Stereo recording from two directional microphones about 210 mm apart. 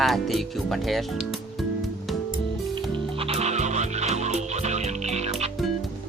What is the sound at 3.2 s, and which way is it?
Music, 30° right (ahead or behind).